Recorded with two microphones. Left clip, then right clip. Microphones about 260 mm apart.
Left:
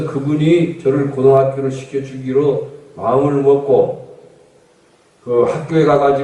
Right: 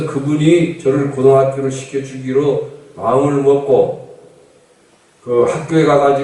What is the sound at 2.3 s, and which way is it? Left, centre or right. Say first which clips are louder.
Speech: even; left.